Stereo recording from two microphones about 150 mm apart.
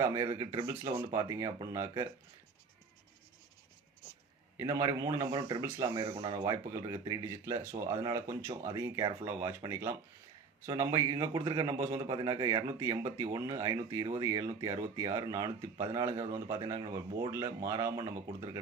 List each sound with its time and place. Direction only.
0.0 s speech: 20° right (ahead or behind)
4.5 s speech: 20° right (ahead or behind)